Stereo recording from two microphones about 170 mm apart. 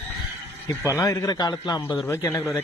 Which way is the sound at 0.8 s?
15° left (ahead or behind).